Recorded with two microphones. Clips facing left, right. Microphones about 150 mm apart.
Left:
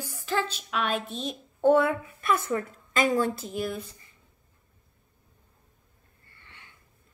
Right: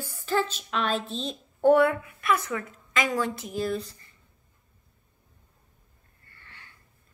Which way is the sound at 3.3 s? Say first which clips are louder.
Right 1 dB; 25° left (ahead or behind).